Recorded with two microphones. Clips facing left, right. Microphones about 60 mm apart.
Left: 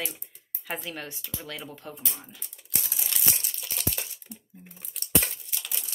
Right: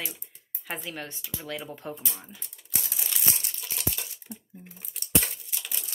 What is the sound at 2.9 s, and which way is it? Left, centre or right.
Crumpling, centre.